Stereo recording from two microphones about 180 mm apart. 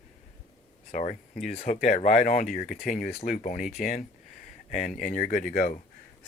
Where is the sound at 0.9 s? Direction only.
45° left (ahead or behind).